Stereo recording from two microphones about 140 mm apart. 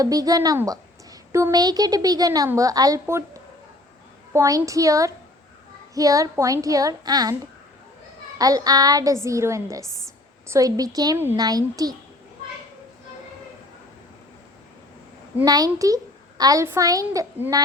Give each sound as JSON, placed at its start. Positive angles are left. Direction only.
{"t": 0.0, "sound": "a child's voice", "side_deg": -25}
{"t": 8.4, "sound": "a child's voice", "side_deg": -25}
{"t": 15.4, "sound": "a child's voice", "side_deg": -25}